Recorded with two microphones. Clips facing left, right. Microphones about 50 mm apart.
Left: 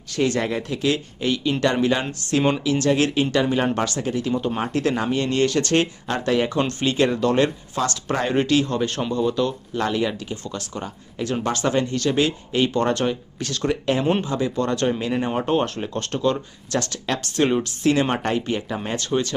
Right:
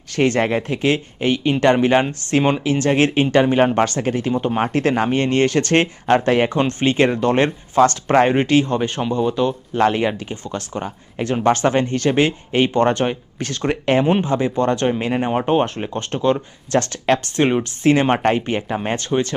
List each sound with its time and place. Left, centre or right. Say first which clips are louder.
0.1 s speech: right 5 dB; right
9.8 s speech: right 6 dB; right
14.0 s speech: right 4 dB; centre
14.3 s speech: right 5 dB; right